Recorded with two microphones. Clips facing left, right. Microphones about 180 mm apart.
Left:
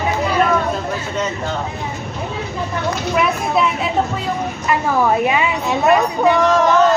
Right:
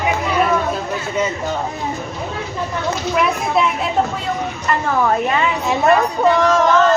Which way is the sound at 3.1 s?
Centre (ahead or behind).